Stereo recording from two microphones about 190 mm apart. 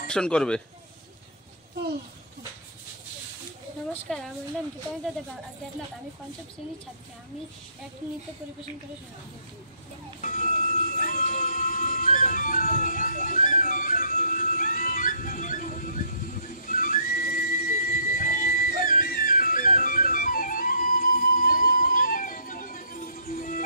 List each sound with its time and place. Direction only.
0.1 s speech: 5° left (ahead or behind)
3.9 s speech: centre (ahead or behind)
10.2 s music: 45° left (ahead or behind)